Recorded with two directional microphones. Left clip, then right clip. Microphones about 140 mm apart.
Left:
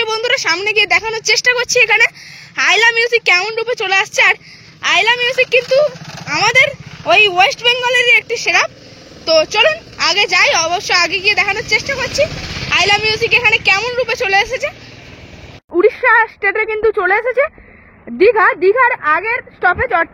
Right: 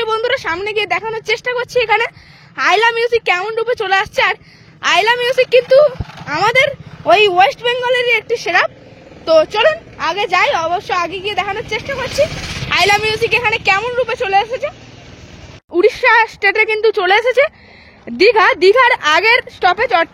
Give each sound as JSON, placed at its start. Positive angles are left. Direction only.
{"t": 0.0, "sound": "a sound", "side_deg": -20}
{"t": 0.9, "sound": "a woman's voice", "side_deg": -10}
{"t": 1.7, "sound": "speech", "side_deg": -20}
{"t": 4.8, "sound": "a woman's voice", "side_deg": -30}
{"t": 9.9, "sound": "a woman's voice", "side_deg": -10}
{"t": 11.0, "sound": "a woman's voice", "side_deg": -5}
{"t": 12.3, "sound": "speech", "side_deg": 35}
{"t": 12.6, "sound": "a woman's voice", "side_deg": -15}
{"t": 15.7, "sound": "a woman's voice", "side_deg": -30}
{"t": 17.1, "sound": "a woman's voice", "side_deg": -50}
{"t": 19.6, "sound": "a woman's voice", "side_deg": -40}